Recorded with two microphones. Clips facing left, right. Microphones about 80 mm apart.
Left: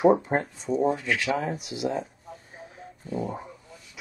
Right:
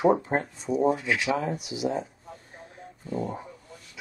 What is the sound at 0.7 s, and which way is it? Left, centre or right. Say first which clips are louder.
Speech: right 1 dB; centre.